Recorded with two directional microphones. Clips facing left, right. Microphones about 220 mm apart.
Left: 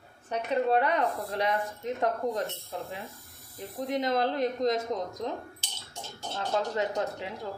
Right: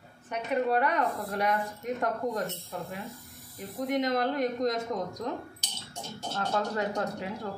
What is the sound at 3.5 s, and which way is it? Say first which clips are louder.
Speech: right 2 dB; 30° left (ahead or behind).